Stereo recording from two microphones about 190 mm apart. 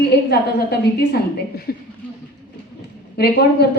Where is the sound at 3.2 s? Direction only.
55° left (ahead or behind).